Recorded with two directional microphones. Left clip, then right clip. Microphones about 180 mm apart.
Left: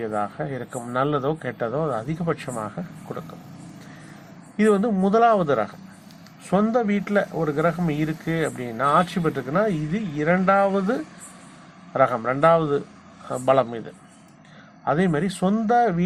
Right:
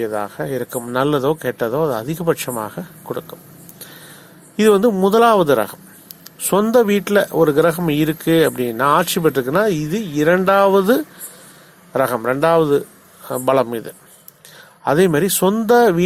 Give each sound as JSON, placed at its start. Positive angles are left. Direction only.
{"t": 0.0, "sound": "speech", "side_deg": -25}
{"t": 4.5, "sound": "speech", "side_deg": -35}